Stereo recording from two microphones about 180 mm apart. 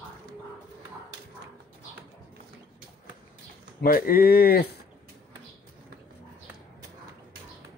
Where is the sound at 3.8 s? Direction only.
55° left (ahead or behind).